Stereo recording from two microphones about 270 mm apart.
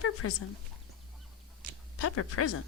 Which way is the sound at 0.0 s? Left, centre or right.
Left.